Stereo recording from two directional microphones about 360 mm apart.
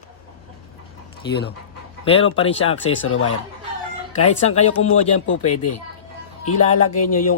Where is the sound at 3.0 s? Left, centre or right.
Left.